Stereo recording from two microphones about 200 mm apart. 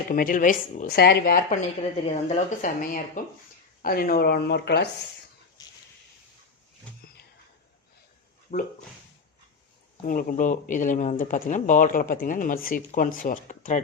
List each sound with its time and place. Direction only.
0.1 s speech: 40° left (ahead or behind)
2.0 s speech: 35° left (ahead or behind); by 4.9 s 55° left (ahead or behind)
5.6 s a sound: 20° left (ahead or behind)
8.5 s speech: 45° left (ahead or behind)
10.0 s speech: 45° left (ahead or behind)